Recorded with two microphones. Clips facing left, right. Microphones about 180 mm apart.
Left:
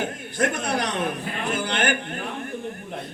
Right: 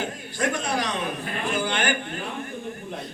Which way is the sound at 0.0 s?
55° left (ahead or behind).